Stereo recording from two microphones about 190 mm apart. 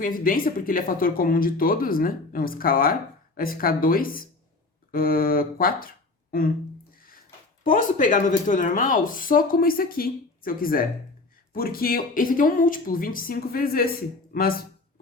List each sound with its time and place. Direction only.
0.0 s speech: 45° left (ahead or behind)
7.6 s speech: 45° left (ahead or behind)